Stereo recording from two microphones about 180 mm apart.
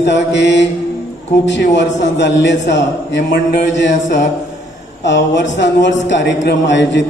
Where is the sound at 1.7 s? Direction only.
75° left (ahead or behind).